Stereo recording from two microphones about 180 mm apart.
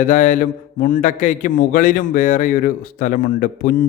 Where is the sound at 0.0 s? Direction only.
45° left (ahead or behind).